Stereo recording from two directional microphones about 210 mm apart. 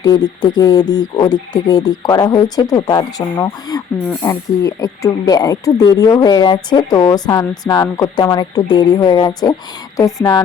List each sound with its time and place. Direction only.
0.0 s speech: 20° left (ahead or behind)